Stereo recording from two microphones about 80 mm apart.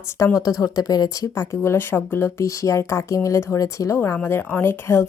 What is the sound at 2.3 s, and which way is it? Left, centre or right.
Speech, left.